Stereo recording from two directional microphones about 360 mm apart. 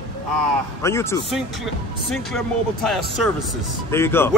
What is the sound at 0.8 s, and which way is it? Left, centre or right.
Speech, centre.